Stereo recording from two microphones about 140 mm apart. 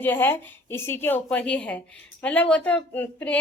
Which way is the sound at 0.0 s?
15° left (ahead or behind).